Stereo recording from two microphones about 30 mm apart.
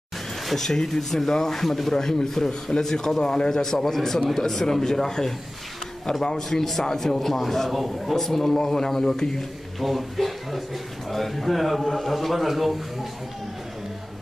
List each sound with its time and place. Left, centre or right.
0.6 s a man's voice: centre
7.7 s a man's voice: centre
8.2 s speech: centre
8.6 s a man's voice: left
9.8 s a man's voice: centre